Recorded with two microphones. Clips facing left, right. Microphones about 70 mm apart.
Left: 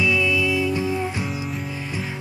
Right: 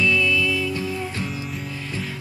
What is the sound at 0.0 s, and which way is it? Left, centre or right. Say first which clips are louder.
Music: even; centre.